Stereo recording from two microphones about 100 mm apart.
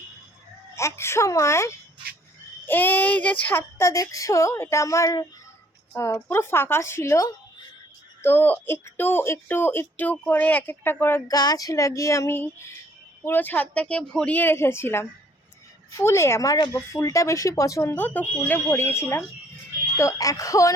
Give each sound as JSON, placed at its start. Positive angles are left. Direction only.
{"t": 0.8, "sound": "speech", "side_deg": 25}
{"t": 3.8, "sound": "speech", "side_deg": 35}
{"t": 11.3, "sound": "speech", "side_deg": 40}
{"t": 14.3, "sound": "speech", "side_deg": 25}
{"t": 17.9, "sound": "speech", "side_deg": 15}